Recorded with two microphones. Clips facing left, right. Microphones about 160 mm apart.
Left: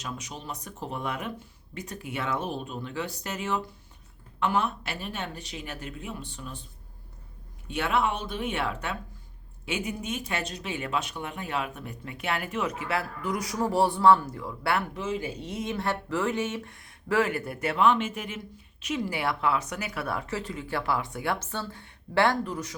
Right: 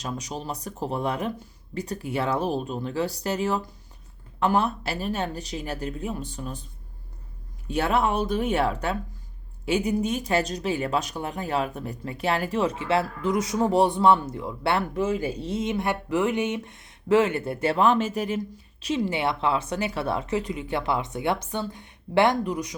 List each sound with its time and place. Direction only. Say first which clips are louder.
0.0 s speech: right 6 dB; 35° right (ahead or behind)
7.7 s speech: right 4 dB; 40° right (ahead or behind)
14.9 s speech: right 6 dB; 45° right (ahead or behind)
15.6 s speech: right 2 dB; 15° right (ahead or behind)